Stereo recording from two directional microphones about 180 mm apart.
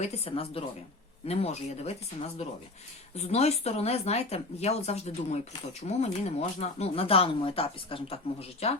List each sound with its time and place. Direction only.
0.0 s speech: 35° left (ahead or behind)